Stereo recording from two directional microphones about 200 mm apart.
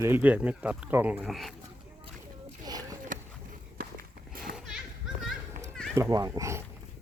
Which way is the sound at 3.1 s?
40° right (ahead or behind).